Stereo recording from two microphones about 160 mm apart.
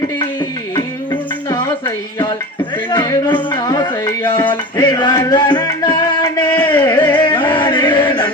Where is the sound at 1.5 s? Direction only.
25° left (ahead or behind).